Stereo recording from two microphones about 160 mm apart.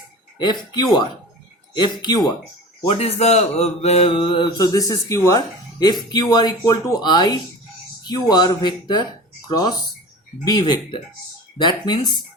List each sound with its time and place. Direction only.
1.7 s speech: 30° left (ahead or behind)
2.9 s speech: 40° left (ahead or behind)